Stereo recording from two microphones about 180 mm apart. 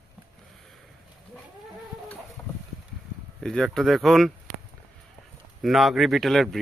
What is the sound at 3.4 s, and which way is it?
Speech, 5° left (ahead or behind).